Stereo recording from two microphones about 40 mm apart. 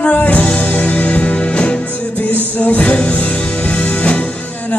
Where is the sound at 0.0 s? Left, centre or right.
Left.